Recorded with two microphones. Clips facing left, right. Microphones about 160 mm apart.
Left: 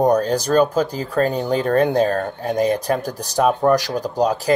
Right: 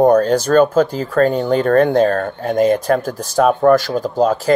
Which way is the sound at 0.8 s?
15° left (ahead or behind).